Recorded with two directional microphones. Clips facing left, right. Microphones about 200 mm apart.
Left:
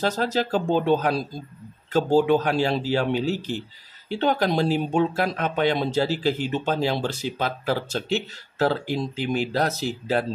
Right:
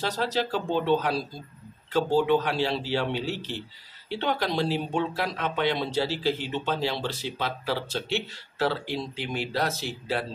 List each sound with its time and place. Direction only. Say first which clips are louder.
0.0 s speech: left 4 dB; 45° left (ahead or behind)